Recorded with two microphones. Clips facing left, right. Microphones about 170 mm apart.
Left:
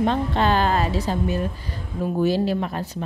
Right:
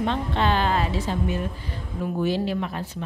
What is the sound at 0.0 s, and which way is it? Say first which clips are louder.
A woman's voice: left 3 dB; 40° left (ahead or behind).